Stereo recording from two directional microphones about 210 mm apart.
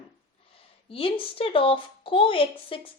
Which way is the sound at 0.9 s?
25° left (ahead or behind).